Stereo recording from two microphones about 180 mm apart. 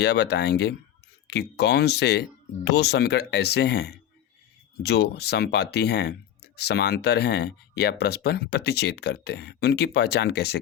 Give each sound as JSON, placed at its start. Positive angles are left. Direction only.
{"t": 0.0, "sound": "speech", "side_deg": 70}